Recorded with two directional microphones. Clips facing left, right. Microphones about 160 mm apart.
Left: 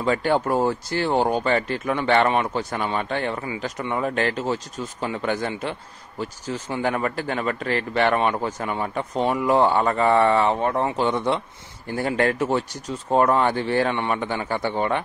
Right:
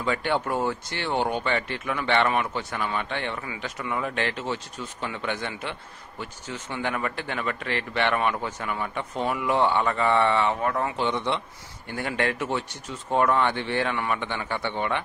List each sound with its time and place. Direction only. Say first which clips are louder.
0.0 s speech: left 5 dB; 35° left (ahead or behind)
10.6 s speech: left 4 dB; 25° left (ahead or behind)
11.0 s a man's voice: left 4 dB; 45° left (ahead or behind)